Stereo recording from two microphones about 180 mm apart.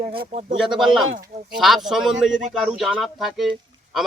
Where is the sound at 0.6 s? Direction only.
5° right (ahead or behind).